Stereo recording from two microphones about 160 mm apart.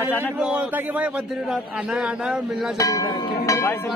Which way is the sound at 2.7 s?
20° left (ahead or behind).